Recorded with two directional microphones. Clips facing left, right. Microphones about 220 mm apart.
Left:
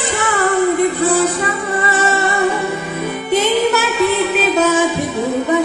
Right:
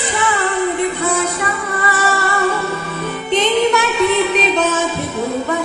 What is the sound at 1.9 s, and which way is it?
Music, 25° left (ahead or behind).